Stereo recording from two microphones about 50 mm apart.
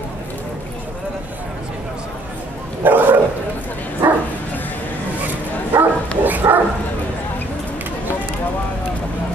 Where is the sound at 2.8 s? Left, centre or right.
Right.